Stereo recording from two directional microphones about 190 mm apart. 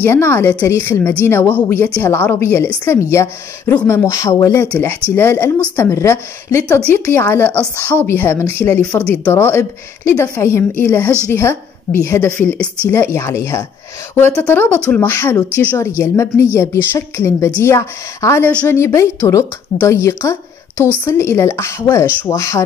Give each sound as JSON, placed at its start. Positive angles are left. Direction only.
{"t": 0.0, "sound": "a woman's voice", "side_deg": 10}